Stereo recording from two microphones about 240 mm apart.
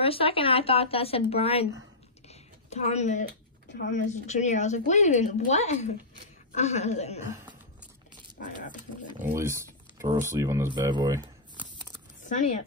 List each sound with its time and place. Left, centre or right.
0.0 s speech: left
2.2 s typing: left
3.6 s a sound: left
3.9 s speech: left
8.4 s speech: left
9.3 s speech: centre
12.3 s speech: left